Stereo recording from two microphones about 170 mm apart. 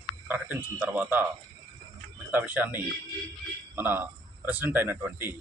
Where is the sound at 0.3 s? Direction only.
10° right (ahead or behind).